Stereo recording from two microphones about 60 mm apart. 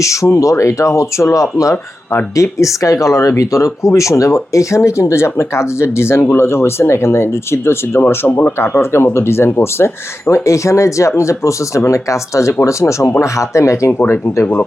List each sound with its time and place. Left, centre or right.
0.0 s speech: left
8.3 s speech: left
8.5 s speech: left